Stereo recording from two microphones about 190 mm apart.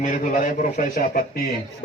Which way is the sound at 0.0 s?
45° left (ahead or behind).